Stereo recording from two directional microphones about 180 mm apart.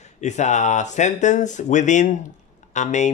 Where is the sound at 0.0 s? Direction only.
40° left (ahead or behind).